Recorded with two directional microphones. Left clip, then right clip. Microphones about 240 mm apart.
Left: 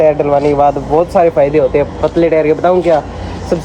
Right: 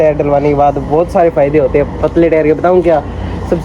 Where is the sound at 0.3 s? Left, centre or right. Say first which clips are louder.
Even; left.